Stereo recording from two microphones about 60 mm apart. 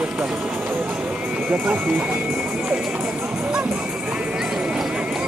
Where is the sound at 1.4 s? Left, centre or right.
Right.